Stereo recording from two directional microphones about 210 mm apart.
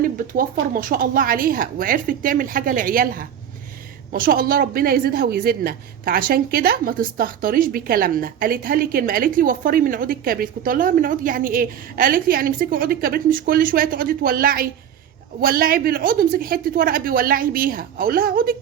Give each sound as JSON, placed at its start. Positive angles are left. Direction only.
{"t": 0.0, "sound": "a woman's voice", "side_deg": -40}